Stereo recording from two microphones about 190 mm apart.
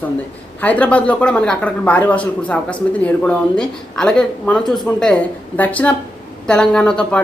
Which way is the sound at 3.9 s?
5° left (ahead or behind).